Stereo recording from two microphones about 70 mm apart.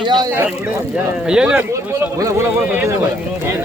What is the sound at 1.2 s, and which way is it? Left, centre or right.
Speech, centre.